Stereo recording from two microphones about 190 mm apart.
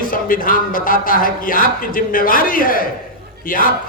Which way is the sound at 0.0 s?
45° left (ahead or behind).